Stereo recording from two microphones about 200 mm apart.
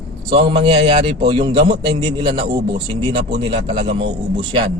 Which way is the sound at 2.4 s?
60° right (ahead or behind).